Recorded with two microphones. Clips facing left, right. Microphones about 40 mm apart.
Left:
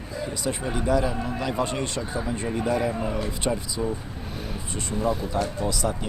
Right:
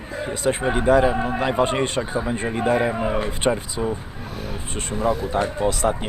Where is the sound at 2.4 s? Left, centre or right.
Right.